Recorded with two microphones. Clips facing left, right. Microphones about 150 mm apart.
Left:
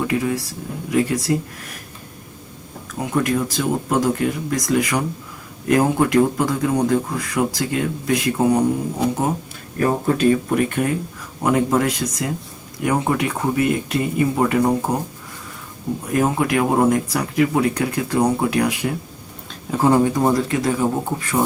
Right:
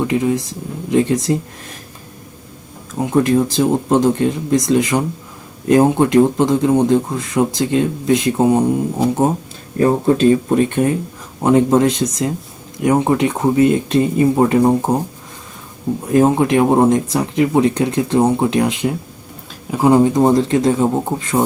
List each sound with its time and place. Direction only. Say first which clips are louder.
0.1 s speech: right 4 dB; 20° right (ahead or behind)
3.0 s speech: right 6 dB; 25° right (ahead or behind)
9.7 s speech: right 5 dB; 25° right (ahead or behind)
16.1 s speech: right 6 dB; 25° right (ahead or behind)